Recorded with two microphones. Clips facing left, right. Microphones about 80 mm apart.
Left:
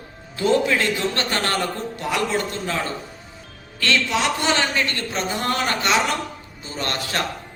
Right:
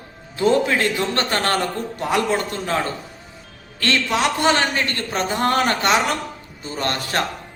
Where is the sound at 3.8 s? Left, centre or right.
Right.